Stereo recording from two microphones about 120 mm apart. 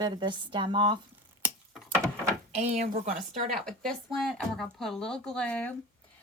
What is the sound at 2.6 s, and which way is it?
Speech, 80° right.